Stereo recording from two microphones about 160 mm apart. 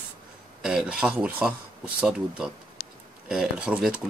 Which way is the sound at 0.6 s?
5° right (ahead or behind).